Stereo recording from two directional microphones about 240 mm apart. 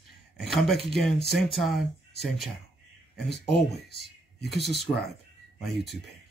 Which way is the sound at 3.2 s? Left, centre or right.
Left.